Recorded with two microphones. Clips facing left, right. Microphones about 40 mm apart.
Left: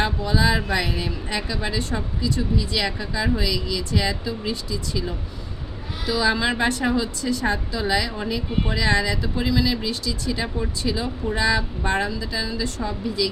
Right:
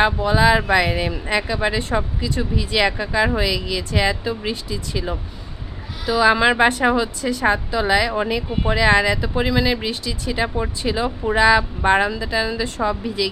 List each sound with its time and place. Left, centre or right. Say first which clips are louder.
0.0 s speech: right 6 dB; right